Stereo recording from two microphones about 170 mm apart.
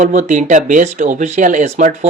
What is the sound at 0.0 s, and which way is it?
Speech, 45° right (ahead or behind).